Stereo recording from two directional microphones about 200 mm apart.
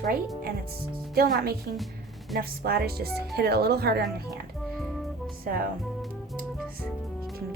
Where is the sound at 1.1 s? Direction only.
50° right (ahead or behind).